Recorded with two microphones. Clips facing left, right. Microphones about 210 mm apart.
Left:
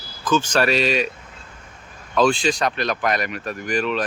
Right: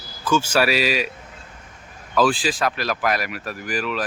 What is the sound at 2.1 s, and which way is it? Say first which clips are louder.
Speech: left 1 dB; 5° right (ahead or behind).